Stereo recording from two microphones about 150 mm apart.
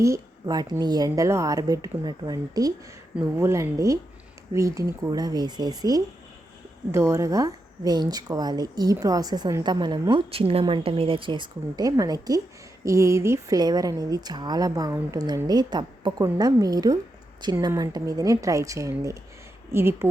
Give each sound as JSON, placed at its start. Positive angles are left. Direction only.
{"t": 0.0, "sound": "a woman's voice", "side_deg": -20}